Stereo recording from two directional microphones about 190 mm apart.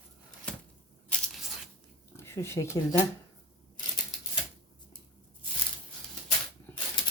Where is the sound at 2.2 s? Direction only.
15° left (ahead or behind).